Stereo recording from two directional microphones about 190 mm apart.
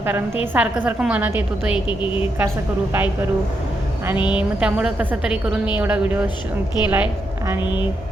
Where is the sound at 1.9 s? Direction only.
25° left (ahead or behind).